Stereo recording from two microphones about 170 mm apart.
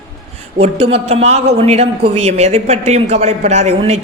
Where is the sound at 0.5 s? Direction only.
35° right (ahead or behind).